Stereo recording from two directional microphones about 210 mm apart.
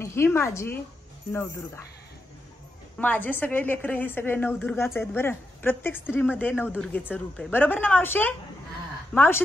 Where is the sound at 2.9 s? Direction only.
5° left (ahead or behind).